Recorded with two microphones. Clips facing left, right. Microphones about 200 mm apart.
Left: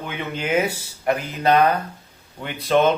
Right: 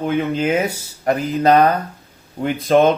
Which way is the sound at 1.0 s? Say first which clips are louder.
Right 5 dB; 40° right (ahead or behind).